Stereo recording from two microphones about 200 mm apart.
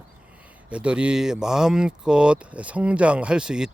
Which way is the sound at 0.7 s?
5° right (ahead or behind).